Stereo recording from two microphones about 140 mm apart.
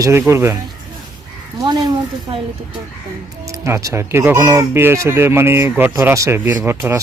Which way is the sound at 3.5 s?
20° right (ahead or behind).